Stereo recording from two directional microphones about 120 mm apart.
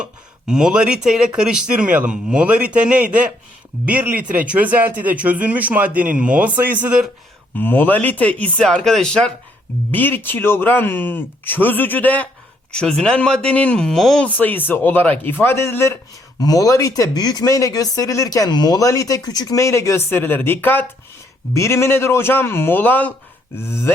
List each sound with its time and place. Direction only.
0.0 s speech: 5° right (ahead or behind)
7.5 s speech: 15° left (ahead or behind)